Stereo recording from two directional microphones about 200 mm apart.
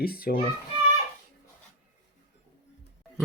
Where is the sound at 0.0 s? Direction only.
50° left (ahead or behind).